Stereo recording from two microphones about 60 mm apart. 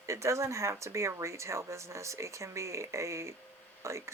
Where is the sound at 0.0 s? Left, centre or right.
Right.